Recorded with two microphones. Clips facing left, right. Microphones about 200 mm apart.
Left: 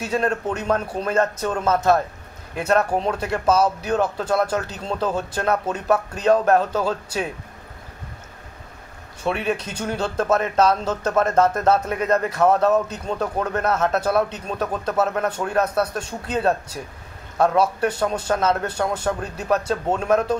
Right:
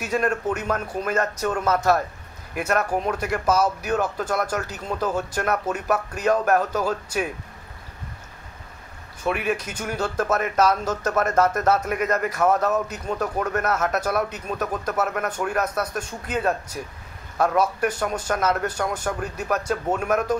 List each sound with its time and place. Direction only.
0.0 s speech: 25° left (ahead or behind)
9.2 s speech: 30° left (ahead or behind)